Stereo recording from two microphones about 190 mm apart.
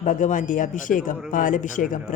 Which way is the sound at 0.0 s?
40° left (ahead or behind).